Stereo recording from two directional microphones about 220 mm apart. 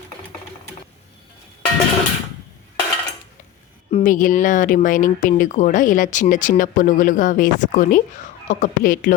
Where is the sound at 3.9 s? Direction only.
35° left (ahead or behind).